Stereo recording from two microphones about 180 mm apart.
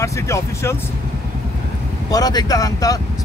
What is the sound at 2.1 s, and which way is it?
Speech, 20° left (ahead or behind).